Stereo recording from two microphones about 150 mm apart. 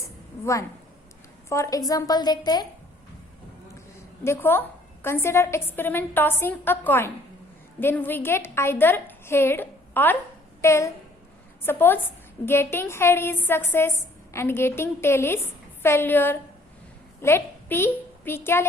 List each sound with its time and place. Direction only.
0.0 s a sound: 20° left (ahead or behind)
1.5 s a woman's voice: 20° left (ahead or behind)
4.2 s a woman's voice: 15° left (ahead or behind)